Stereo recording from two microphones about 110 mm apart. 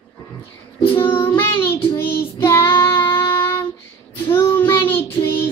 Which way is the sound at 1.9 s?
25° left (ahead or behind).